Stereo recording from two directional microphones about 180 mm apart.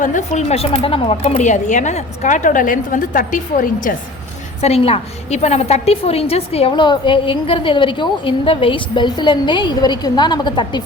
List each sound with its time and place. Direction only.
0.0 s speech: 45° left (ahead or behind)
4.6 s a woman's voice: 35° left (ahead or behind)